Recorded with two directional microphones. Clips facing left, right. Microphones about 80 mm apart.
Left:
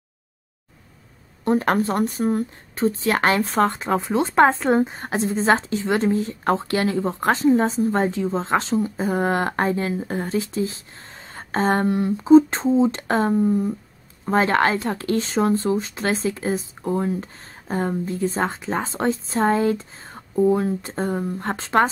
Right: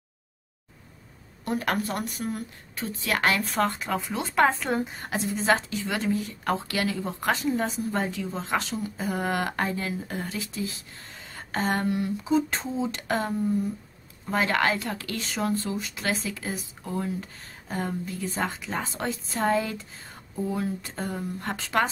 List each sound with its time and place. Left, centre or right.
1.4 s speech: left